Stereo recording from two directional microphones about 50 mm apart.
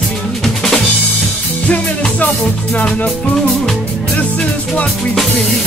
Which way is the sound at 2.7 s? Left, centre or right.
Centre.